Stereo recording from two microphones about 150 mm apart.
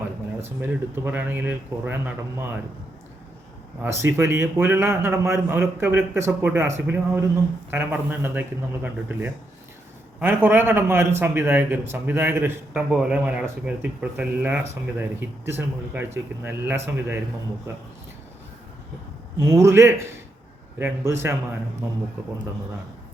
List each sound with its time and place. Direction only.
0.6 s speech: 15° right (ahead or behind)
3.8 s speech: 15° right (ahead or behind)
12.7 s speech: 5° right (ahead or behind)
19.4 s a man's voice: 20° right (ahead or behind)